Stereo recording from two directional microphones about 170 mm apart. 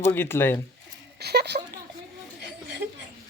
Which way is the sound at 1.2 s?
75° right (ahead or behind).